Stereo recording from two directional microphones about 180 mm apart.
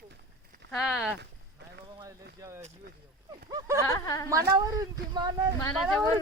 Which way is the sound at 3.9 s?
20° left (ahead or behind).